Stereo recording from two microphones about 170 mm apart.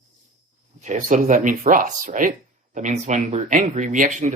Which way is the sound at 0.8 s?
45° right (ahead or behind).